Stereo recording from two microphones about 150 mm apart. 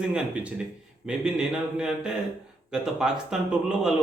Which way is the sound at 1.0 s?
5° right (ahead or behind).